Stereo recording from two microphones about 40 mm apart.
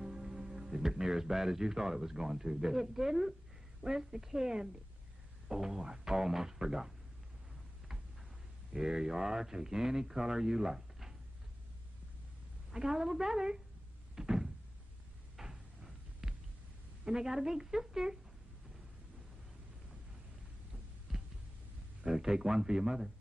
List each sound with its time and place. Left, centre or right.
0.0 s a man's voice: centre
8.7 s speech: centre
12.7 s speech: centre
14.1 s door: centre
15.3 s cupboard open or close: centre
16.2 s a sound: centre
17.0 s speech: centre
21.1 s a sound: centre
22.0 s speech: centre